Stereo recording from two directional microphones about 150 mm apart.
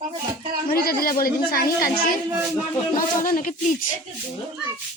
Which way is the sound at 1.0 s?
75° left (ahead or behind).